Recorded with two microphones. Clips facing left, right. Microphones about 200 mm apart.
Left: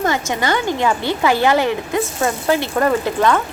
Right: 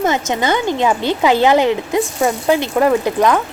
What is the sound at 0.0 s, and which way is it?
A woman's voice, 20° right (ahead or behind).